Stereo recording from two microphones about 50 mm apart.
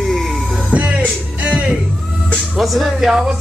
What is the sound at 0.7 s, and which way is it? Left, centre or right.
Music, right.